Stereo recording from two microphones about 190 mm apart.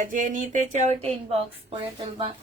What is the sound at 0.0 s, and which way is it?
Speech, 45° right (ahead or behind).